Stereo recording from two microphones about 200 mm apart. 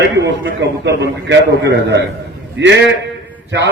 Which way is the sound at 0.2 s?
60° right (ahead or behind).